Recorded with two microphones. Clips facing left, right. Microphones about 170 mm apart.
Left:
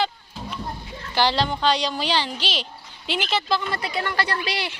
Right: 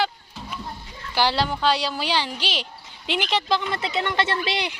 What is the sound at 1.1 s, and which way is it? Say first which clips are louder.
Speech: left 1 dB; 10° right (ahead or behind).